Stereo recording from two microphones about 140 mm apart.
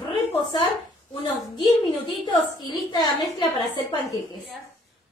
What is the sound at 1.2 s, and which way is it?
A woman's voice, 30° left (ahead or behind).